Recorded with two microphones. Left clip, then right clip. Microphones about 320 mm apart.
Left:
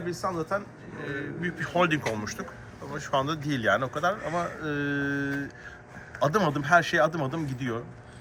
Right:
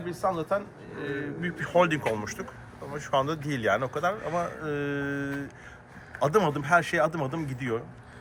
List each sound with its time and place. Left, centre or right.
0.0 s speech: right
2.9 s a man's voice: centre